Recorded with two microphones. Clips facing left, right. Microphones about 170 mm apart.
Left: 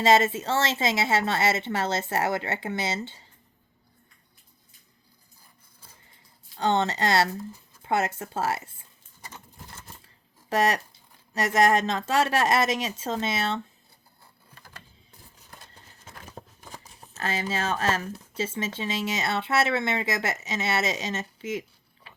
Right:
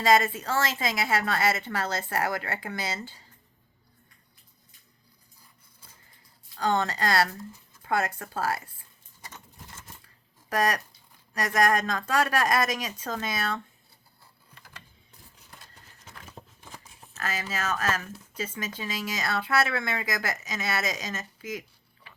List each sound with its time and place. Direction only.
0.0 s speech: 25° left (ahead or behind)
6.6 s speech: 25° left (ahead or behind)
10.5 s speech: 25° left (ahead or behind)
16.4 s a sound: 45° left (ahead or behind)
17.2 s speech: 25° left (ahead or behind)